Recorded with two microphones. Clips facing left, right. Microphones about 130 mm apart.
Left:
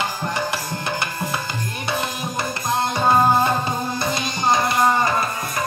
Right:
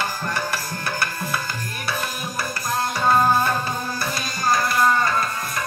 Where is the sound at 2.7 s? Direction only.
25° left (ahead or behind).